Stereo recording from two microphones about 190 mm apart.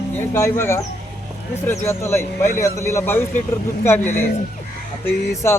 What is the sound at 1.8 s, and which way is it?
Speech, 15° left (ahead or behind).